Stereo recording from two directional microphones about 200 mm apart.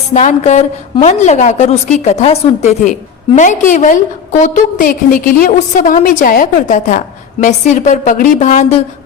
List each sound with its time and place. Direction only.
0.1 s a woman's voice: 35° left (ahead or behind)